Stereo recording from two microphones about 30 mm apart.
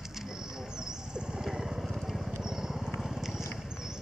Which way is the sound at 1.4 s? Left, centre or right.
Centre.